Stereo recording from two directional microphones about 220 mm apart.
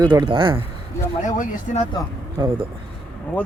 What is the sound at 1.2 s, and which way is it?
Speech, 35° left (ahead or behind).